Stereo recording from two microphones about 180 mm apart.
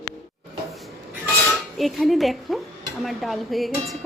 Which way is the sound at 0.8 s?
Centre (ahead or behind).